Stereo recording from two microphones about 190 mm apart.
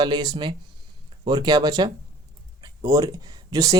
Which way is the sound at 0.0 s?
20° right (ahead or behind).